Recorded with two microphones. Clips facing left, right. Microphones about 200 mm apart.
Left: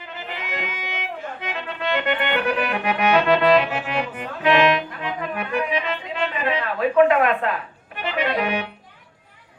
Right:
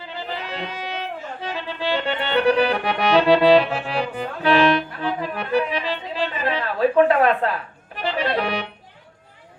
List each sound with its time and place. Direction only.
0.0 s music: 35° right (ahead or behind)
6.4 s speech: 35° right (ahead or behind)
8.0 s music: 35° right (ahead or behind)